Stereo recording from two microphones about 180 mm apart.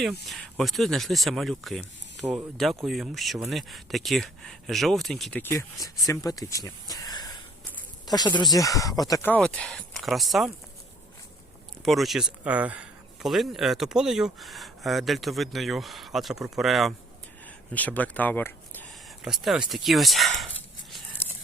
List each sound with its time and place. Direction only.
0.3 s speech: centre (ahead or behind)
11.9 s speech: centre (ahead or behind)
19.2 s speech: centre (ahead or behind)